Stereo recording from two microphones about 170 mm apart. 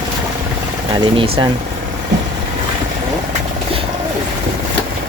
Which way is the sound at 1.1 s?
35° right (ahead or behind).